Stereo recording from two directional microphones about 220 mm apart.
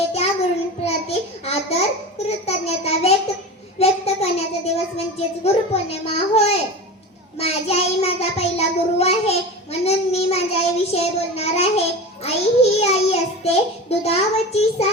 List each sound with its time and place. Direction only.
0.9 s a sound: 30° left (ahead or behind)
3.8 s a child's voice: 30° left (ahead or behind)
7.3 s child singing: 30° left (ahead or behind)